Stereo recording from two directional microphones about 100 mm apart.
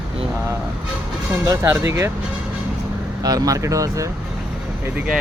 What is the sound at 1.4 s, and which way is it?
Speech, 30° right (ahead or behind).